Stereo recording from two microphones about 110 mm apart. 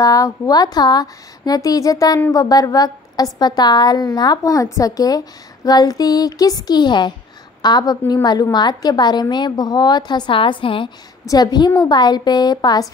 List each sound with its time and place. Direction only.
0.0 s a woman's voice: 35° left (ahead or behind); by 10.9 s 50° left (ahead or behind)
11.2 s a woman's voice: 35° left (ahead or behind)